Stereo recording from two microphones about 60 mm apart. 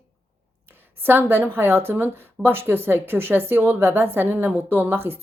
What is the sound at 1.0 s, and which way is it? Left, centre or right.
Speech, right.